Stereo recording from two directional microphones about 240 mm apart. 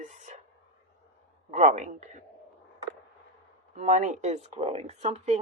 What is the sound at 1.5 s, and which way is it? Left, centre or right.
Speech, right.